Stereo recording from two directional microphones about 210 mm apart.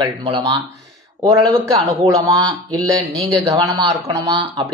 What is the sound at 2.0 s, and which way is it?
Speech, 15° right (ahead or behind).